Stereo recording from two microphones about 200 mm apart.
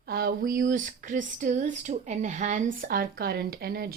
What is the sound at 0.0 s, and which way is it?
Speech, 50° right (ahead or behind).